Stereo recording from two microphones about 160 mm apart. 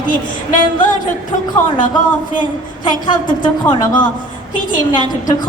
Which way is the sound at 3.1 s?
30° left (ahead or behind).